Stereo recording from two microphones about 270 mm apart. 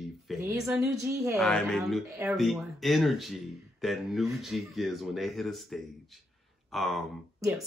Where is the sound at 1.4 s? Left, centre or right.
Centre.